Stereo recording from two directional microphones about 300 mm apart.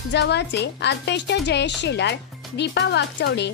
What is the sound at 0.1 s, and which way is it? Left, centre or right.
A woman's voice, left.